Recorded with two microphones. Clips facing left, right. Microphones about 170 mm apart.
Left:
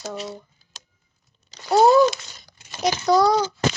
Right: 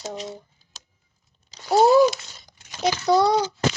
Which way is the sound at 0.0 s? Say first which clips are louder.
Left 1 dB; 20° right (ahead or behind).